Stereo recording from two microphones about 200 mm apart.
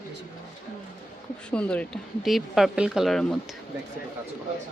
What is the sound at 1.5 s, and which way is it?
Speech, 5° left (ahead or behind).